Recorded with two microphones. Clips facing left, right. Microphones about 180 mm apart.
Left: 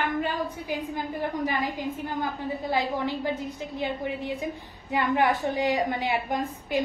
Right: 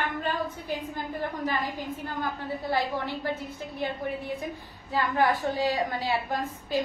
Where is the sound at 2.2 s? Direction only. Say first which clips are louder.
Left 2 dB; 20° left (ahead or behind).